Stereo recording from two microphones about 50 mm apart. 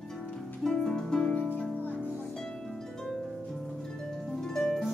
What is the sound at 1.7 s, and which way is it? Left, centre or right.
Music, left.